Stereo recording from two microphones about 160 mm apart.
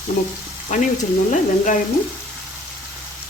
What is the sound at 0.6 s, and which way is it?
Speech, 50° left (ahead or behind).